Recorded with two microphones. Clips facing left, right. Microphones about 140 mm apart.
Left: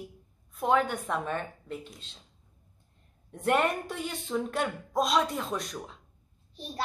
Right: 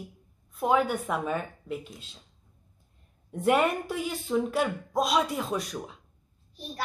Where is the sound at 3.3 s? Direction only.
5° right (ahead or behind).